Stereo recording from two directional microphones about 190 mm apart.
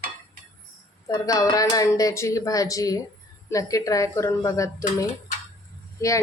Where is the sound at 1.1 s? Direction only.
20° left (ahead or behind).